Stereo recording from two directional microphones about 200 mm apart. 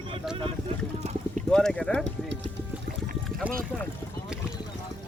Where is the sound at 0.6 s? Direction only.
35° right (ahead or behind).